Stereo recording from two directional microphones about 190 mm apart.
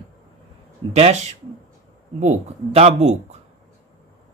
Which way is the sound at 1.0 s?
35° right (ahead or behind).